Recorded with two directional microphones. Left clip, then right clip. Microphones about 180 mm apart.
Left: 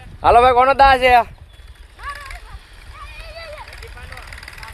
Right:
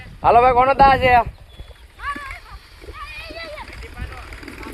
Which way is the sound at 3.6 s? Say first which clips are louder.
Even; 55° left (ahead or behind).